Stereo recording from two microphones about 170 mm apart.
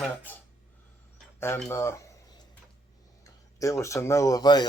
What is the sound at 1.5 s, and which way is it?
Speech, 10° left (ahead or behind).